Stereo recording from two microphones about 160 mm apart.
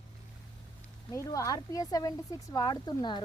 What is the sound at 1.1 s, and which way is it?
Speech, 20° left (ahead or behind).